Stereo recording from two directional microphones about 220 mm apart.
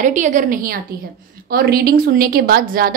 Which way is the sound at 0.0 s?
35° right (ahead or behind).